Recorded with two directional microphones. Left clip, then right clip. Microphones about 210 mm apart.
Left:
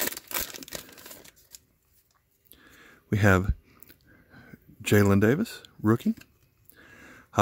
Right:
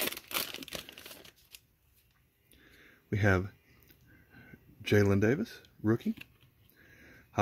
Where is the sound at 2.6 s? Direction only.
25° left (ahead or behind).